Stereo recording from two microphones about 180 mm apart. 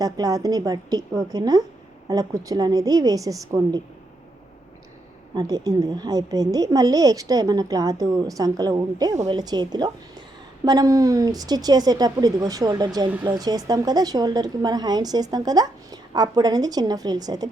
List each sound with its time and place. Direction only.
0.0 s a woman's voice: 20° right (ahead or behind)
5.3 s a woman's voice: 20° right (ahead or behind)